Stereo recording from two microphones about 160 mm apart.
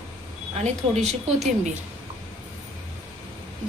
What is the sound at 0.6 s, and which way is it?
Speech, 45° right (ahead or behind).